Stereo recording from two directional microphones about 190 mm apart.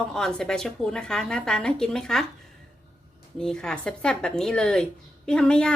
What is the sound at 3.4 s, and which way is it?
A woman's voice, 5° left (ahead or behind).